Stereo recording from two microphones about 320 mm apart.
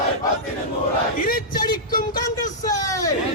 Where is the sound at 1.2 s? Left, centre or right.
Left.